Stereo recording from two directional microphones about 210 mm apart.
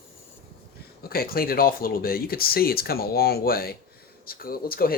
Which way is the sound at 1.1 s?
45° left (ahead or behind).